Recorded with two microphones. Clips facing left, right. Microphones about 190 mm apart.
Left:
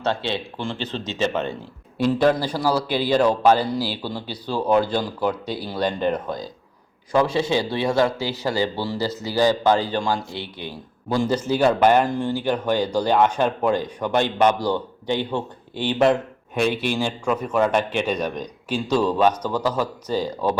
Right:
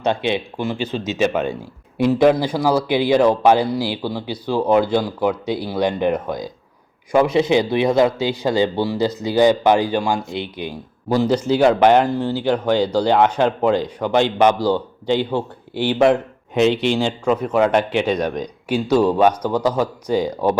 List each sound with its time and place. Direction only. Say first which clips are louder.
0.0 s a man's voice: right 5 dB; 15° right (ahead or behind)
16.6 s a man's voice: right 5 dB; 20° right (ahead or behind)